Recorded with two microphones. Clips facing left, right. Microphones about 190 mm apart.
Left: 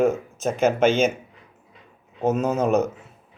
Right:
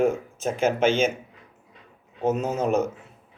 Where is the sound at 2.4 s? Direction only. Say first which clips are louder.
Left 4 dB; 55° left (ahead or behind).